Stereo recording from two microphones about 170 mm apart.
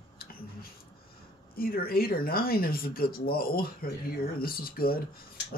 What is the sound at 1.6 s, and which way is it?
Speech, 60° left (ahead or behind).